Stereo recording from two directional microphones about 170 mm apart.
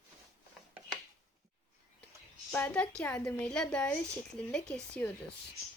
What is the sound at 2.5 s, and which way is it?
A woman's voice, 5° left (ahead or behind).